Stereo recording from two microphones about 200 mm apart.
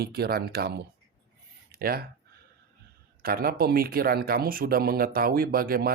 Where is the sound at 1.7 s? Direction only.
50° right (ahead or behind).